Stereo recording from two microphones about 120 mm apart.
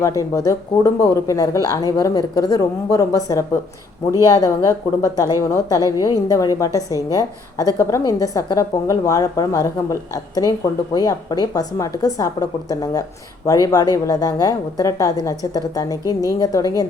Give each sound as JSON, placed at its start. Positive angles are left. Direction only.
{"t": 0.2, "sound": "a woman's voice", "side_deg": 30}